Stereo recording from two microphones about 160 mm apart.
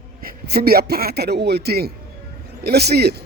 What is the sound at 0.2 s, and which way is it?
A man's voice, 70° right (ahead or behind).